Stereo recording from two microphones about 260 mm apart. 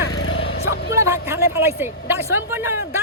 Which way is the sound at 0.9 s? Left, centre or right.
Centre.